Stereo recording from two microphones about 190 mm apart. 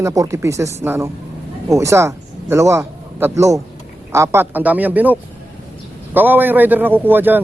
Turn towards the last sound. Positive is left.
turn(degrees=-10)  # may be behind; listen again after turning